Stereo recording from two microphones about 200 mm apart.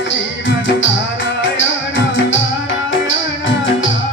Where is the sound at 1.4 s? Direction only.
70° left (ahead or behind).